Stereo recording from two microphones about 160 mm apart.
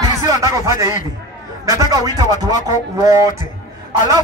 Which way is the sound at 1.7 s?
20° right (ahead or behind).